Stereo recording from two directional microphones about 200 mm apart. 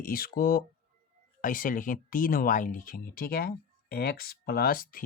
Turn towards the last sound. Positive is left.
turn(degrees=45)  # may be behind; listen again after turning